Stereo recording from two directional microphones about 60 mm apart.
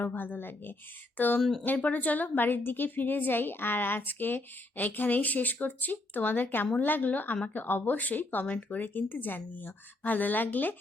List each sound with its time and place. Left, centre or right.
0.0 s a woman's voice: left
1.4 s speech: centre
1.6 s a woman's voice: left